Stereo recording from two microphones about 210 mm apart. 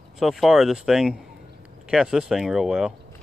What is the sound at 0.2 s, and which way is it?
Speech, centre (ahead or behind).